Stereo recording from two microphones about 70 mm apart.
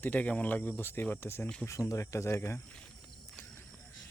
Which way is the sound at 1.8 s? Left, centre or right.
Left.